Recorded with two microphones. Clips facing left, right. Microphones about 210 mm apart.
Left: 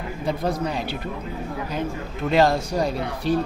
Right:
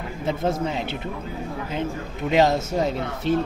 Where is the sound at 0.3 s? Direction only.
25° right (ahead or behind).